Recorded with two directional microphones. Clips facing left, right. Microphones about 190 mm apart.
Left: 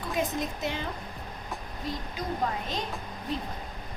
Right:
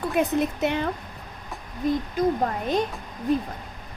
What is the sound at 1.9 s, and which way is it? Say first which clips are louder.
Speech: right 11 dB; 50° right (ahead or behind).